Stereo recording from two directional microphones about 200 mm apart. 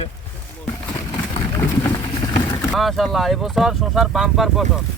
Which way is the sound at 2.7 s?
Centre (ahead or behind).